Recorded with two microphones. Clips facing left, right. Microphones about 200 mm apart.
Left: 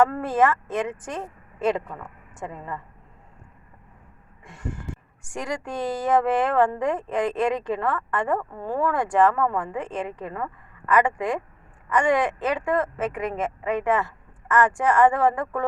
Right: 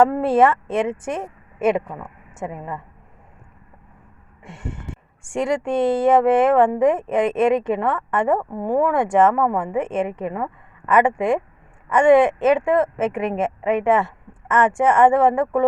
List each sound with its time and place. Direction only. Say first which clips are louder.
0.2 s speech: right 5 dB; 30° right (ahead or behind)
4.4 s speech: right 1 dB; 25° right (ahead or behind)